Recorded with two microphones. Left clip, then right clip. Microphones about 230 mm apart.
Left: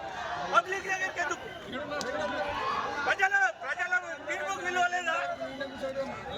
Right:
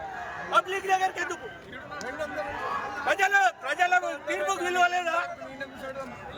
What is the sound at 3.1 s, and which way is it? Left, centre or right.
A man's voice, right.